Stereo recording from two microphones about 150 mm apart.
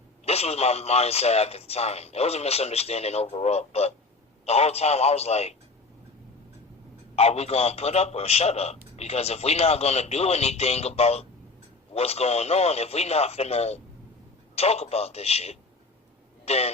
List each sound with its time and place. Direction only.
0.3 s a man's voice: 45° left (ahead or behind)
7.2 s a man's voice: 45° left (ahead or behind)